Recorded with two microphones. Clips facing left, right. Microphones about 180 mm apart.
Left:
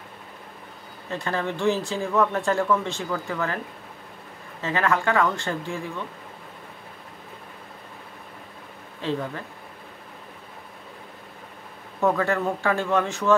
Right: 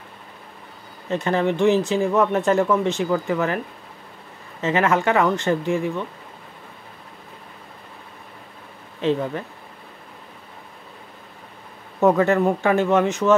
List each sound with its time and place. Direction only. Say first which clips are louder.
1.1 s speech: right 7 dB; 20° right (ahead or behind)
4.6 s speech: right 4 dB; 20° right (ahead or behind)
9.0 s speech: right 7 dB; 20° right (ahead or behind)
12.2 s speech: right 6 dB; 20° right (ahead or behind)